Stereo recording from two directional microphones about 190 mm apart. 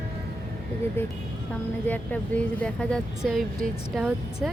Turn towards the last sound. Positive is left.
turn(degrees=0)  # may be behind; listen again after turning